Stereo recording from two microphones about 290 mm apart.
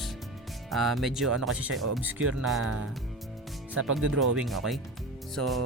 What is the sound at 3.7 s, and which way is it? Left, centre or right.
Speech, right.